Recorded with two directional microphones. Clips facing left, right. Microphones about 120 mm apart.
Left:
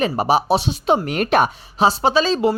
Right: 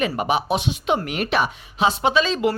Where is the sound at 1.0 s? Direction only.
45° left (ahead or behind).